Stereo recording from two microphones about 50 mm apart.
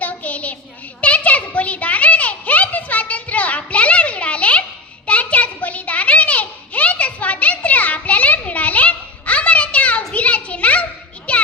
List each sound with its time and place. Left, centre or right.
0.0 s child singing: left
1.0 s a sound: left
11.3 s music: left